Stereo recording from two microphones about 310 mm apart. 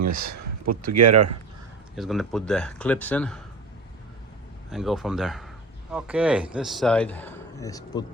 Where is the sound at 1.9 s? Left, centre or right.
Centre.